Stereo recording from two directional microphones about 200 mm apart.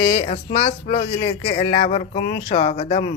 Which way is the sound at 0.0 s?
30° left (ahead or behind).